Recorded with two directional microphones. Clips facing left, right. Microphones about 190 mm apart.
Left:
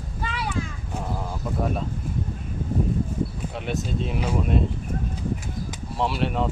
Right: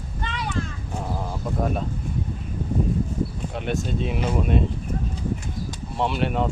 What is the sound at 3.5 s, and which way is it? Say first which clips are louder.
Speech: right 2 dB; centre (ahead or behind).